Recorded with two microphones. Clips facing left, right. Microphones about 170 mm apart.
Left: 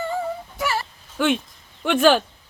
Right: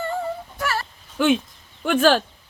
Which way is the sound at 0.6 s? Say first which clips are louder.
Left 1 dB; 10° left (ahead or behind).